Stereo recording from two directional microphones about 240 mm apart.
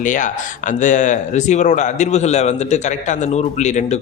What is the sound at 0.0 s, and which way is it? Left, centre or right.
Speech, left.